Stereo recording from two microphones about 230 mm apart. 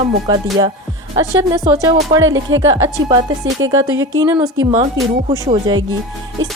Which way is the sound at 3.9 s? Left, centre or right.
Right.